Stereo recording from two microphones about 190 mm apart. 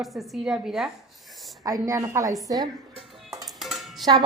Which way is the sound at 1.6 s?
20° right (ahead or behind).